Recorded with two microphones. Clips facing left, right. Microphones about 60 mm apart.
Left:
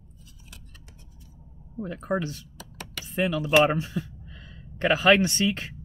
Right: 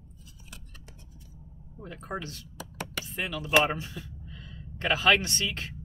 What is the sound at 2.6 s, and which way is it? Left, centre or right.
Computer keyboard, centre.